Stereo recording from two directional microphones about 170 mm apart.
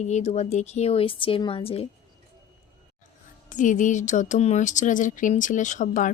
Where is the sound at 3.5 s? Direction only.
50° left (ahead or behind).